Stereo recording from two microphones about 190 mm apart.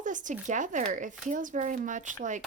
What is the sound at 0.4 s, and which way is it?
Speech, 40° right (ahead or behind).